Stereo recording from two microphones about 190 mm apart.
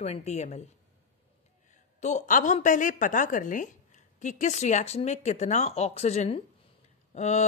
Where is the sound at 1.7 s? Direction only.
40° left (ahead or behind).